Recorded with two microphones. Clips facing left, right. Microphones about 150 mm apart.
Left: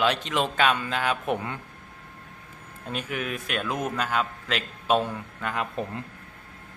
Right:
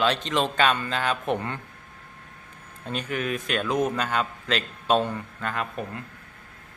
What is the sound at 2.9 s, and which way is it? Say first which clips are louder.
Speech: right 3 dB; 5° left (ahead or behind).